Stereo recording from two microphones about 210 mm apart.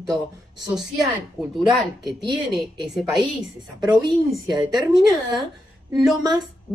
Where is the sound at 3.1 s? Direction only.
20° right (ahead or behind).